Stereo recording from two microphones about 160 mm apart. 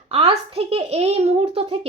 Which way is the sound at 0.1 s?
35° right (ahead or behind).